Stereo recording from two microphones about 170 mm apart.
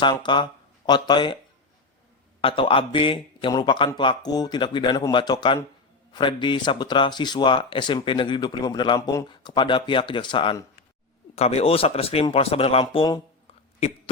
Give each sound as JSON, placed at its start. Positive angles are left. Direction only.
{"t": 0.0, "sound": "speech", "side_deg": 25}
{"t": 2.4, "sound": "speech", "side_deg": 30}